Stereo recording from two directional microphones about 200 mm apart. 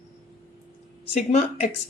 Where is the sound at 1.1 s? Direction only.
35° left (ahead or behind).